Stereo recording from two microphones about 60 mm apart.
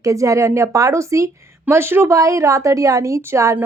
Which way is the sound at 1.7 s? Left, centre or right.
Right.